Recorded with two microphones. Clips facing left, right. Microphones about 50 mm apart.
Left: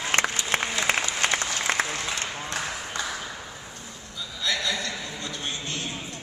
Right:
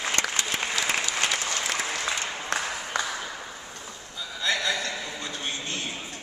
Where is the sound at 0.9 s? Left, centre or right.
Left.